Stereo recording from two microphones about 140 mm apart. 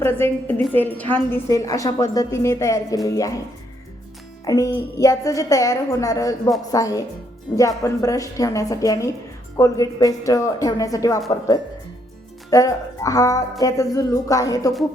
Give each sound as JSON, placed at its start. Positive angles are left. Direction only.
{"t": 0.0, "sound": "a woman's voice", "side_deg": 15}
{"t": 1.5, "sound": "speech", "side_deg": 25}
{"t": 4.4, "sound": "speech", "side_deg": 25}